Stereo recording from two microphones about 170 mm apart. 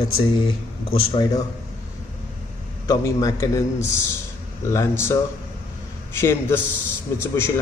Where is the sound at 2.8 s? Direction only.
20° left (ahead or behind).